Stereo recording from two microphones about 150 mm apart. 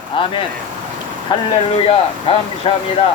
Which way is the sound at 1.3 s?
30° left (ahead or behind).